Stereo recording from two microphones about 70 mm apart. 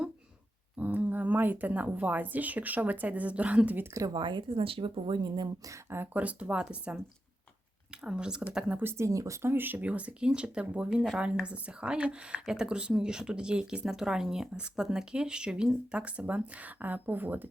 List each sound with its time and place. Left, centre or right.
0.8 s speech: right
4.0 s speech: right
5.9 s speech: right
8.8 s speech: right